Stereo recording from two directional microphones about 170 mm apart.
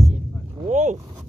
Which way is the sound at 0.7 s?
45° right (ahead or behind).